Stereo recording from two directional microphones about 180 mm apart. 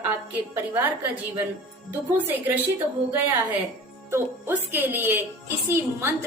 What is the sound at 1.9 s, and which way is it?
A woman's voice, 10° right (ahead or behind).